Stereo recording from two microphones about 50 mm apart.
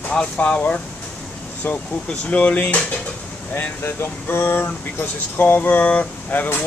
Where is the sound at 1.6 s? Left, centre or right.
Left.